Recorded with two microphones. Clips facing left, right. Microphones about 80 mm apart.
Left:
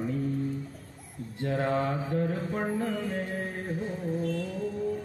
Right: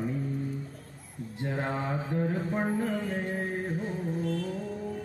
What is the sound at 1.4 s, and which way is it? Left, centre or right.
Speech, centre.